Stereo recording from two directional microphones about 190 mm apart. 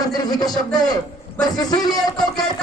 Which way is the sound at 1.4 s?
20° left (ahead or behind).